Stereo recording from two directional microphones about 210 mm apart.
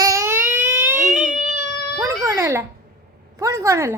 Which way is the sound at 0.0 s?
15° right (ahead or behind).